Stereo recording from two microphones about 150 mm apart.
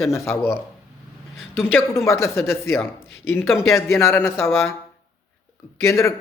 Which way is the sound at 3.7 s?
15° left (ahead or behind).